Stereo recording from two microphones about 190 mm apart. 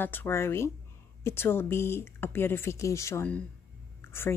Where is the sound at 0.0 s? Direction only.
10° left (ahead or behind).